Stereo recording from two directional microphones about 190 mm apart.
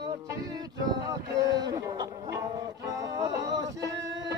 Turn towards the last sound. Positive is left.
turn(degrees=-20)  # may be behind; listen again after turning